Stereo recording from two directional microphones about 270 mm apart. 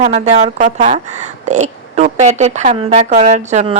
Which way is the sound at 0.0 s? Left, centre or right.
Right.